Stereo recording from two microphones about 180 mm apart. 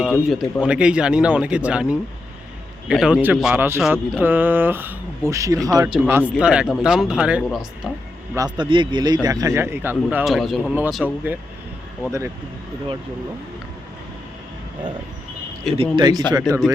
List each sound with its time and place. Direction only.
0.0 s a man's voice: centre (ahead or behind)
8.4 s speech: 25° right (ahead or behind); by 11.3 s 10° right (ahead or behind)
15.8 s speech: 25° right (ahead or behind)